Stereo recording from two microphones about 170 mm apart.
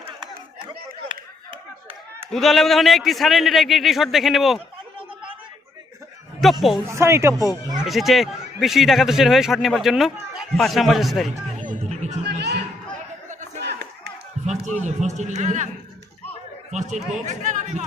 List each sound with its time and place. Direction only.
2.3 s speech: centre (ahead or behind)
6.4 s speech: centre (ahead or behind)
6.8 s speech: 15° right (ahead or behind)
7.9 s speech: centre (ahead or behind)
11.5 s music: 45° right (ahead or behind)
12.2 s a sound: 75° right (ahead or behind)
13.6 s clapping: 85° right
14.4 s a man's voice: 45° right (ahead or behind)
16.7 s speech: 45° right (ahead or behind)